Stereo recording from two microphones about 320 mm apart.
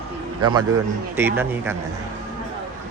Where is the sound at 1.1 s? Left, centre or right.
Centre.